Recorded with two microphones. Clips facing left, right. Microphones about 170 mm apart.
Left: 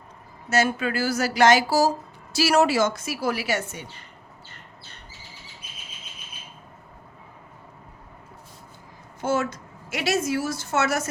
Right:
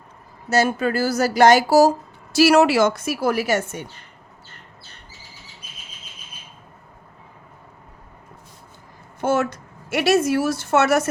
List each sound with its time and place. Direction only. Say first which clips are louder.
0.5 s speech: right 4 dB; 40° right (ahead or behind)
2.4 s a woman's voice: right 5 dB; 65° right (ahead or behind); by 3.8 s 50° right (ahead or behind)
9.2 s a woman's voice: right 4 dB; 60° right (ahead or behind)